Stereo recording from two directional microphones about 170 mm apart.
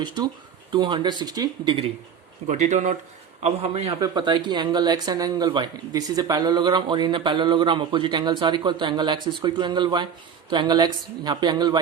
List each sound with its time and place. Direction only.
0.7 s speech: 25° right (ahead or behind)
2.5 s a man's voice: 45° right (ahead or behind); by 11.8 s 25° right (ahead or behind)